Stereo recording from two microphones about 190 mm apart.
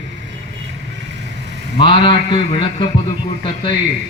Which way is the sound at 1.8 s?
25° left (ahead or behind).